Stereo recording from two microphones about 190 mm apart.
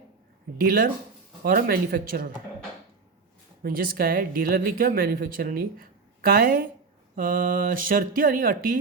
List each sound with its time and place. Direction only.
0.6 s speech: 50° right (ahead or behind)
3.6 s speech: 50° right (ahead or behind)